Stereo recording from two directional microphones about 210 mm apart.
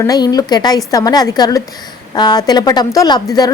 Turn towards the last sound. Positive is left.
turn(degrees=20)  # may be behind; listen again after turning